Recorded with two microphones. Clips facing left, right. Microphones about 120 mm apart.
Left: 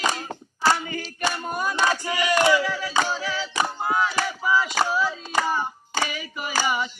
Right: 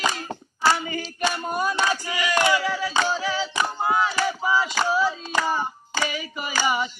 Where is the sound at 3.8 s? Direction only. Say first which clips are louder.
Right 3 dB; 20° right (ahead or behind).